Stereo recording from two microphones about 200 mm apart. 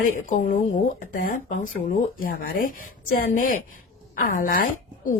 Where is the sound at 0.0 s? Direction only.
40° left (ahead or behind).